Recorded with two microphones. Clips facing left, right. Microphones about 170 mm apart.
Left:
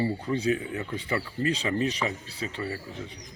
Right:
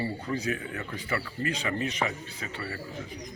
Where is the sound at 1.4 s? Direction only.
35° left (ahead or behind).